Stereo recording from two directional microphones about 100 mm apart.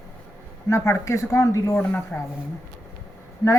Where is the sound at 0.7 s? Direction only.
25° left (ahead or behind).